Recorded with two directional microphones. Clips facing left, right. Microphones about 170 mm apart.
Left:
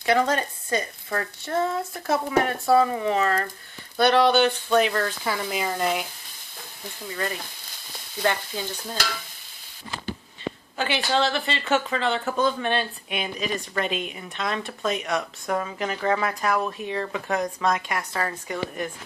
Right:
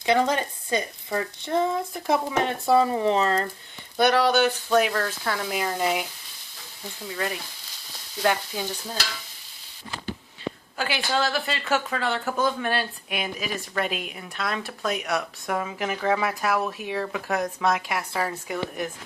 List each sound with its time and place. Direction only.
0.0 s speech: 20° right (ahead or behind)
3.9 s speech: 10° right (ahead or behind)
7.1 s speech: 5° right (ahead or behind)
8.2 s frying: 10° right (ahead or behind)
10.8 s speech: 5° right (ahead or behind)